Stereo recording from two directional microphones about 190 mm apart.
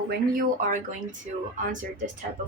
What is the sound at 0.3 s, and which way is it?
Speech, 40° right (ahead or behind).